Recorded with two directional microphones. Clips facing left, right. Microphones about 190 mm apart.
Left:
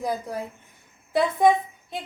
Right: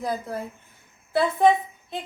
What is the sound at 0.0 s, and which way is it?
A woman's voice, 10° left (ahead or behind).